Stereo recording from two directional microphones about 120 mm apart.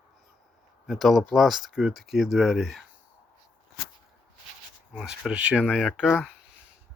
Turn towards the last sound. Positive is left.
turn(degrees=-5)  # may be behind; listen again after turning